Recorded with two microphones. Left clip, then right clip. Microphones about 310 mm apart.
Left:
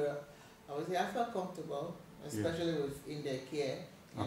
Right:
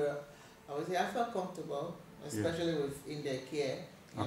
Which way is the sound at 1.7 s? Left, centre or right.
Right.